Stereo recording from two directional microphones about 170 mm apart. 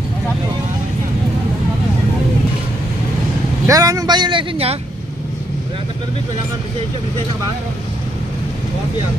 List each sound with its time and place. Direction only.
3.6 s speech: 20° right (ahead or behind)